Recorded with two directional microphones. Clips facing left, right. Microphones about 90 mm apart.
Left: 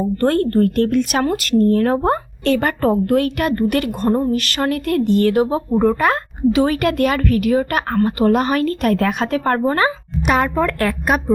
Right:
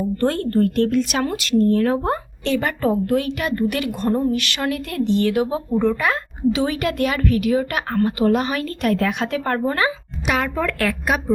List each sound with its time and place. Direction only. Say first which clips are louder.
0.2 s speech: left 4 dB; 50° left (ahead or behind)
4.1 s speech: left 2 dB; 40° left (ahead or behind)